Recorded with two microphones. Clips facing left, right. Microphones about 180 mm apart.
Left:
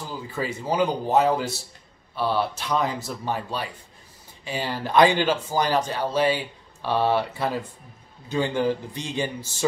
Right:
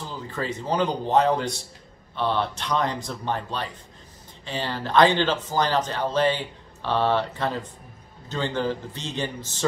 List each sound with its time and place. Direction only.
0.0 s speech: 10° left (ahead or behind)